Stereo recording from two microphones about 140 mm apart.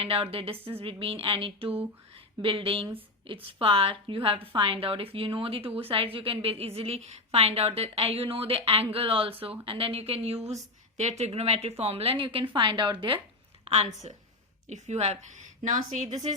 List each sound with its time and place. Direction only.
0.0 s a woman's voice: 45° right (ahead or behind)
13.7 s a woman's voice: 50° right (ahead or behind); by 16.0 s 70° right (ahead or behind)